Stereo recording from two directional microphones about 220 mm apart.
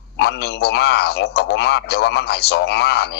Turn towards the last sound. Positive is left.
turn(degrees=50)  # may be behind; listen again after turning